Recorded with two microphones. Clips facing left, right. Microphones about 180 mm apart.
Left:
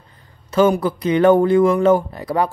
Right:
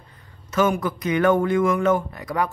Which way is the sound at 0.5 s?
30° left (ahead or behind).